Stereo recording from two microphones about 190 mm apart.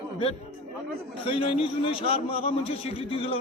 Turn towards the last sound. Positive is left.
turn(degrees=30)  # may be behind; listen again after turning